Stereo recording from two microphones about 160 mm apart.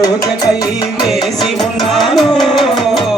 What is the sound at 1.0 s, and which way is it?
Music, centre (ahead or behind).